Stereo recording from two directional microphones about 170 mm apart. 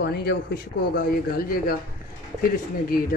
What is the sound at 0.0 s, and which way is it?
Speech, 75° left (ahead or behind).